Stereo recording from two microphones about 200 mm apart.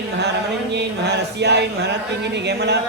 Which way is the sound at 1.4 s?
60° right (ahead or behind).